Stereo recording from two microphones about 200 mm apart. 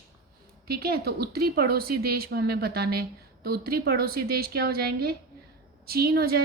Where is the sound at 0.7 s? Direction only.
50° right (ahead or behind).